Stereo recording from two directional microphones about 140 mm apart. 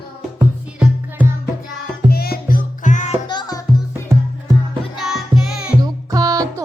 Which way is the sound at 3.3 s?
25° left (ahead or behind).